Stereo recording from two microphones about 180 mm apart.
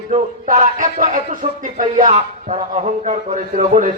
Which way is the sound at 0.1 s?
40° right (ahead or behind).